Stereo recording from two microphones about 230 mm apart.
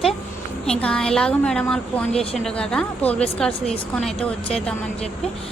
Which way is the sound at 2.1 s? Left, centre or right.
Left.